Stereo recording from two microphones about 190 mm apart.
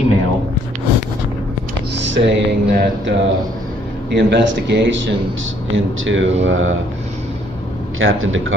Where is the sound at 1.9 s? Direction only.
70° right (ahead or behind).